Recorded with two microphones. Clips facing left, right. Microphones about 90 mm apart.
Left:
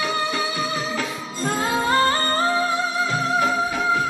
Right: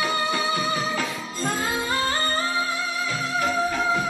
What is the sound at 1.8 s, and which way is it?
Music, 50° left (ahead or behind).